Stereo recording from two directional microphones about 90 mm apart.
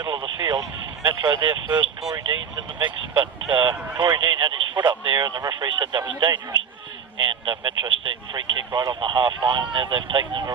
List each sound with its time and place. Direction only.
0.0 s a sound: 50° right (ahead or behind)
1.0 s a man's voice: 55° right (ahead or behind)
2.0 s speech: 40° right (ahead or behind)
2.2 s a man's voice: 60° right (ahead or behind)